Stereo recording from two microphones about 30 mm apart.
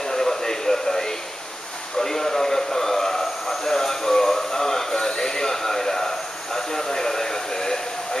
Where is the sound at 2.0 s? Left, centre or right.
Centre.